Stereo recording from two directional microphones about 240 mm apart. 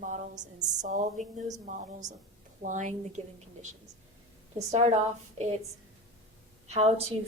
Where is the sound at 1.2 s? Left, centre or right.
Right.